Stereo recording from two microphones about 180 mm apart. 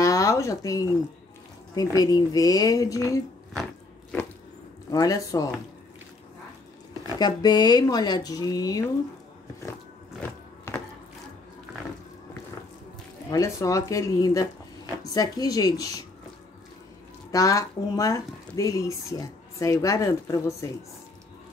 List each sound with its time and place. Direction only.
0.0 s a sound: 20° left (ahead or behind)
1.8 s speech: 20° left (ahead or behind)
4.9 s speech: 20° left (ahead or behind)
7.2 s speech: 25° left (ahead or behind)
10.7 s a sound: 15° left (ahead or behind)
13.3 s speech: 20° left (ahead or behind)
17.3 s speech: 20° left (ahead or behind)